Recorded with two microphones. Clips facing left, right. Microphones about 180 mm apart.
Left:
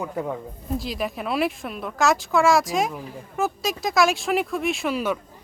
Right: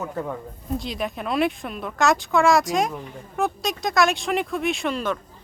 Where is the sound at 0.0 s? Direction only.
10° left (ahead or behind).